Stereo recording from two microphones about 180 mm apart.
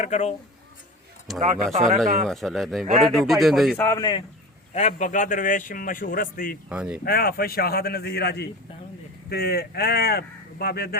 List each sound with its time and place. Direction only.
0.0 s speech: 40° left (ahead or behind)
1.3 s speech: centre (ahead or behind)
1.7 s speech: 40° right (ahead or behind)
2.2 s speech: centre (ahead or behind)
3.8 s speech: 15° left (ahead or behind)
4.7 s a man's voice: 40° left (ahead or behind)
6.7 s speech: 5° right (ahead or behind)
7.0 s speech: 55° left (ahead or behind)